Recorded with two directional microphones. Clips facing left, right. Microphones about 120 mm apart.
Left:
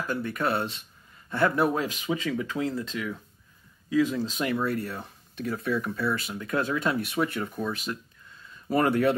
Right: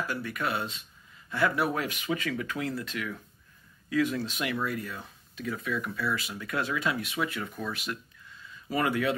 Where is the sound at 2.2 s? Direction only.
25° left (ahead or behind).